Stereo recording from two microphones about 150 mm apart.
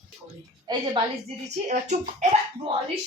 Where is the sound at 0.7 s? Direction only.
30° right (ahead or behind).